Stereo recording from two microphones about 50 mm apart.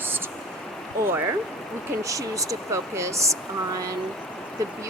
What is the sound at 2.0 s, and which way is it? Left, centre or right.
Speech, right.